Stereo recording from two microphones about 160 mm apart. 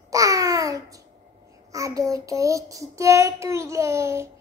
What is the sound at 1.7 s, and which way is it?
Child singing, 20° right (ahead or behind).